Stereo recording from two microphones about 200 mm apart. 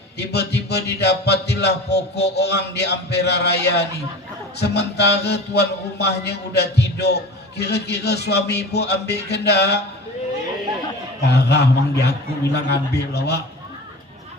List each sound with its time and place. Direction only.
0.2 s mantra: 55° left (ahead or behind)
11.2 s mantra: 55° left (ahead or behind)